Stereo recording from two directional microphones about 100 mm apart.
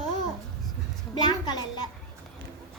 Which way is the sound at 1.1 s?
45° left (ahead or behind).